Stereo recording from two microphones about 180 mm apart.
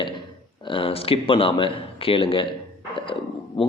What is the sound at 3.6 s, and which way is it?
Speech, 30° left (ahead or behind).